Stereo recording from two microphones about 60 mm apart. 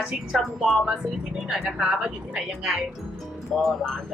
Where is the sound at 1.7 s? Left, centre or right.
Centre.